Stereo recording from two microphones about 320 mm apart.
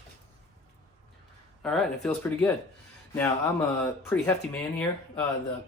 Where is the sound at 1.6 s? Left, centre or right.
Centre.